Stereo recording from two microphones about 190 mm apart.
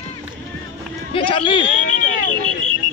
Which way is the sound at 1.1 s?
25° left (ahead or behind).